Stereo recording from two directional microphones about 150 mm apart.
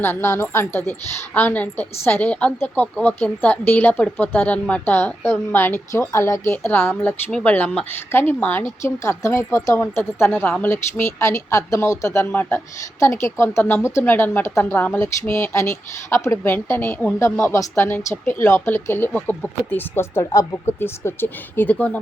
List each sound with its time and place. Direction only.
0.0 s speech: 15° left (ahead or behind)